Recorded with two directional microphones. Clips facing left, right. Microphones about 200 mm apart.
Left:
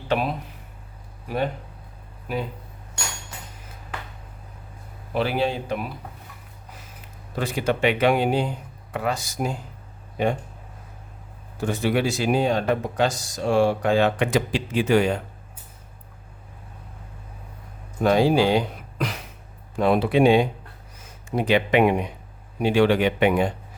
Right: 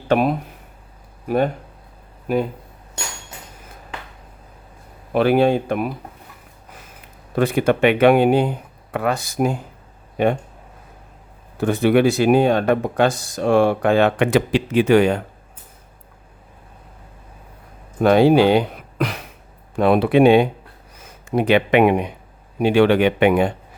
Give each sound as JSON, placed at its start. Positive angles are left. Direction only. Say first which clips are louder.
{"t": 0.1, "sound": "speech", "louder": "right 7 dB", "side_deg": -50}
{"t": 2.2, "sound": "speech", "louder": "right 8 dB", "side_deg": -50}
{"t": 5.1, "sound": "speech", "louder": "right 8 dB", "side_deg": -55}
{"t": 7.3, "sound": "speech", "louder": "right 7 dB", "side_deg": -55}
{"t": 11.5, "sound": "speech", "louder": "right 7 dB", "side_deg": -60}
{"t": 18.0, "sound": "speech", "louder": "right 5 dB", "side_deg": -65}